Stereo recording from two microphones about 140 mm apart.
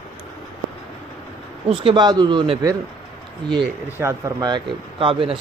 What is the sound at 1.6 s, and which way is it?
Speech, 35° right (ahead or behind).